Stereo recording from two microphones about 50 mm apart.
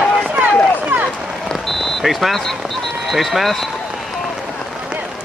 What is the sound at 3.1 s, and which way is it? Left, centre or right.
Speech, centre.